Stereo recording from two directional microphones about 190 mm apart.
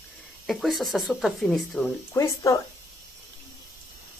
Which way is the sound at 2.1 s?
15° left (ahead or behind).